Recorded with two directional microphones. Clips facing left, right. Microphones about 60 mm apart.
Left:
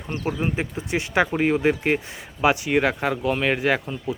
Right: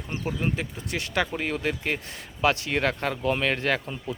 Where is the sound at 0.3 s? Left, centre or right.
Centre.